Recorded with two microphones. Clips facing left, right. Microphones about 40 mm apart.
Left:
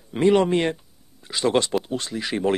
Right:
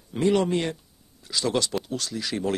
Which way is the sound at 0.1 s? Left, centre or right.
Left.